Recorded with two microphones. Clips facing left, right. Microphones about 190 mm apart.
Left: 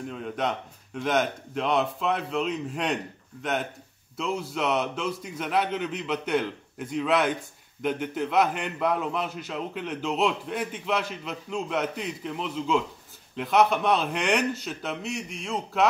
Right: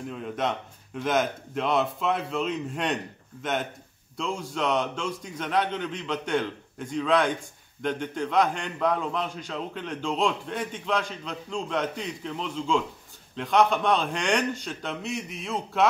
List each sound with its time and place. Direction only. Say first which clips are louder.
0.1 s a man's voice: right 1 dB; centre (ahead or behind)
4.2 s a man's voice: left 1 dB; 5° left (ahead or behind)